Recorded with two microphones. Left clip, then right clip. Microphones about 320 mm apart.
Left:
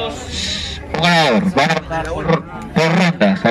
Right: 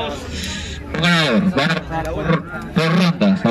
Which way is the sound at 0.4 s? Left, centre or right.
Centre.